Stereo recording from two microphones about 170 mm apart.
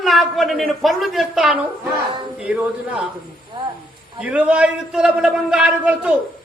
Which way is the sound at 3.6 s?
30° right (ahead or behind).